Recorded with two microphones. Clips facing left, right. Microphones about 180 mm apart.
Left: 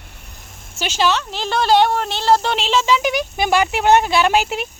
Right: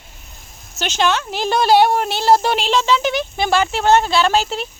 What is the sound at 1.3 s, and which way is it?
Speech, 15° right (ahead or behind).